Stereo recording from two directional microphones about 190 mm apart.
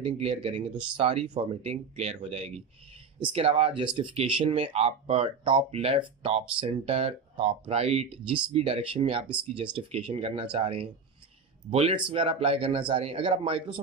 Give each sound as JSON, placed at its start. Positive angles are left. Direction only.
{"t": 0.0, "sound": "speech", "side_deg": -30}